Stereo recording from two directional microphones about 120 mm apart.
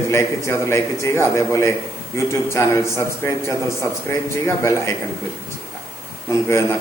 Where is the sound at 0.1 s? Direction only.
20° left (ahead or behind).